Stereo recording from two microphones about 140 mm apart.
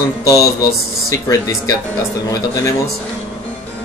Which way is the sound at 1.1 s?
25° left (ahead or behind).